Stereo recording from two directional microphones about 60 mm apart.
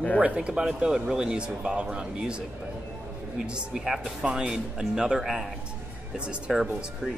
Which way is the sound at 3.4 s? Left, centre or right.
Centre.